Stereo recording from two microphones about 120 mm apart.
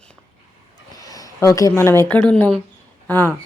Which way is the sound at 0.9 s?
30° left (ahead or behind).